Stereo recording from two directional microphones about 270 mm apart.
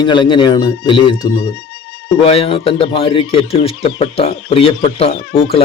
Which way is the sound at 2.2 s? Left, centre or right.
Left.